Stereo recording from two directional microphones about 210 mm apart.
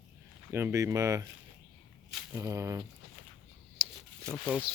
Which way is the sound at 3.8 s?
10° right (ahead or behind).